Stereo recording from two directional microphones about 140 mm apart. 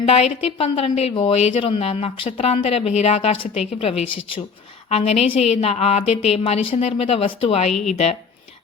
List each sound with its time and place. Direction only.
0.0 s a woman's voice: 45° left (ahead or behind)